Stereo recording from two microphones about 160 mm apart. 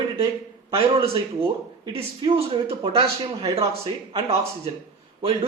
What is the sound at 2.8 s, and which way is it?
Speech, 35° right (ahead or behind).